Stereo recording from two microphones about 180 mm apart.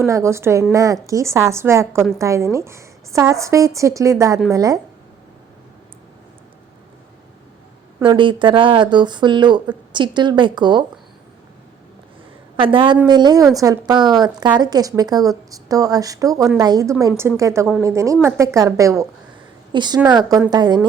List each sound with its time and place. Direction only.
0.0 s a woman's voice: 15° right (ahead or behind)
8.0 s a woman's voice: 25° right (ahead or behind)
12.5 s a woman's voice: 30° right (ahead or behind)